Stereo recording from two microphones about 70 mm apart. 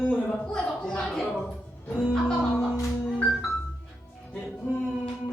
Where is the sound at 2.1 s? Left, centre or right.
Centre.